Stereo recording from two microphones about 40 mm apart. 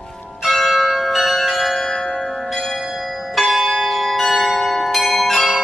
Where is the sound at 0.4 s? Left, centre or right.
Centre.